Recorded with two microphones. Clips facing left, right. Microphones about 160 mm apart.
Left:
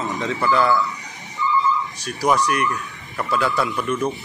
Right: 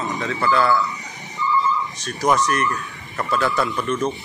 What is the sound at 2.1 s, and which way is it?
Speech, 10° left (ahead or behind).